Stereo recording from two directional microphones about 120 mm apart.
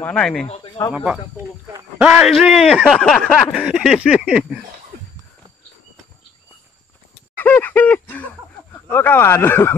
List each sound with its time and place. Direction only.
0.0 s speech: 5° left (ahead or behind)
0.7 s speech: 30° left (ahead or behind)
0.9 s a man's voice: 10° right (ahead or behind)
2.3 s speech: centre (ahead or behind)
7.3 s a sound: 15° left (ahead or behind)
8.8 s speech: 15° left (ahead or behind)